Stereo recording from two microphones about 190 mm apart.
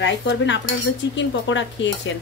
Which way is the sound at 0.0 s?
70° left (ahead or behind).